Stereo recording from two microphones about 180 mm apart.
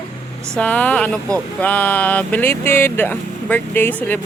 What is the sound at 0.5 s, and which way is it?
Speech, 5° left (ahead or behind).